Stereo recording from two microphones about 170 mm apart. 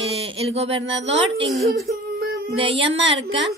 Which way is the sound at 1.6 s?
65° right (ahead or behind).